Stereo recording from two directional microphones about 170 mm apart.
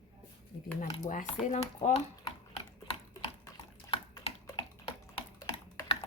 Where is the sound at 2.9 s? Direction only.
35° left (ahead or behind).